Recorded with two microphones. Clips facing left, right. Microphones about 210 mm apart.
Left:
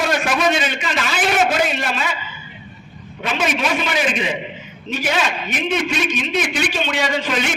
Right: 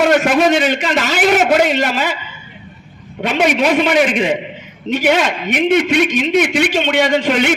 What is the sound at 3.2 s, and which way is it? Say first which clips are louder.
A man's voice: right 7 dB; 65° right (ahead or behind).